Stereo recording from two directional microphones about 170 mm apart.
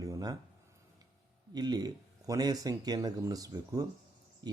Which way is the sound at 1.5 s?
25° right (ahead or behind).